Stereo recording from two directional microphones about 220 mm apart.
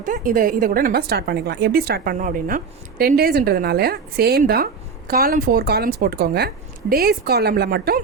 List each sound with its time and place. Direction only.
0.0 s a woman's voice: 40° right (ahead or behind)